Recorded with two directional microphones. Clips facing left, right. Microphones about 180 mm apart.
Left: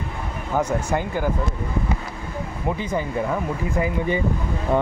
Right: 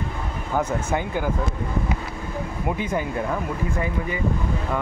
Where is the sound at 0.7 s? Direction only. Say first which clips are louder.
Left 2 dB; 15° left (ahead or behind).